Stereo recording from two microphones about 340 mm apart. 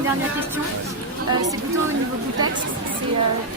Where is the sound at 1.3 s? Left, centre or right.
Right.